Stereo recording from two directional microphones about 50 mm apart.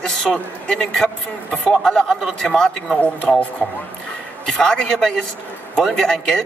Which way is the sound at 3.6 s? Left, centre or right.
Left.